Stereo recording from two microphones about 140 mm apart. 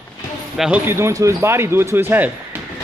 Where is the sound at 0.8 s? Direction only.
20° right (ahead or behind).